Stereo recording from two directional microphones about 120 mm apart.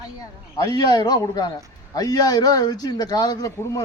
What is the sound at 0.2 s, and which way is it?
A man's voice, 30° left (ahead or behind).